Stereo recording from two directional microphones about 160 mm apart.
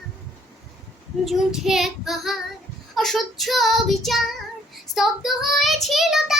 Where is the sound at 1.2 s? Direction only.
Centre (ahead or behind).